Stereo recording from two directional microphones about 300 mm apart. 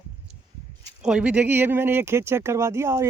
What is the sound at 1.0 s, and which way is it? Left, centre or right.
Speech, centre.